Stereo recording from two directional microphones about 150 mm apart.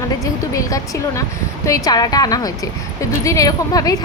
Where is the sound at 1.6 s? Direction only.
25° left (ahead or behind).